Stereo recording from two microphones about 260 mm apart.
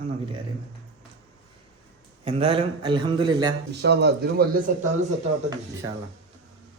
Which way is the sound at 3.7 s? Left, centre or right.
Right.